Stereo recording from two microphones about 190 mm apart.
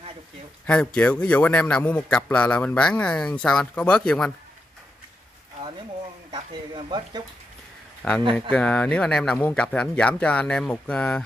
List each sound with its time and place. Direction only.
0.7 s a man's voice: 5° left (ahead or behind)
6.3 s speech: 20° right (ahead or behind)
8.0 s a man's voice: 5° left (ahead or behind)